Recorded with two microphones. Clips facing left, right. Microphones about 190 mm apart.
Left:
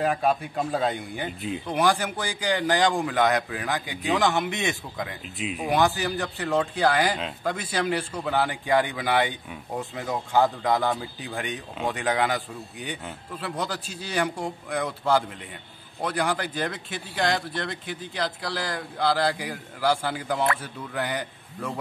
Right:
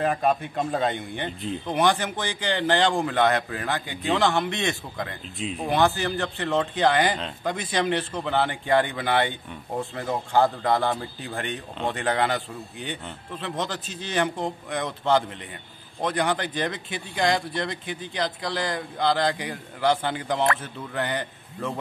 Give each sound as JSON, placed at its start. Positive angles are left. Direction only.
{"t": 0.0, "sound": "a man's voice", "side_deg": 5}
{"t": 3.3, "sound": "a man's voice", "side_deg": 10}
{"t": 4.9, "sound": "a man's voice", "side_deg": 5}
{"t": 8.8, "sound": "a man's voice", "side_deg": 10}
{"t": 10.9, "sound": "a man's voice", "side_deg": 5}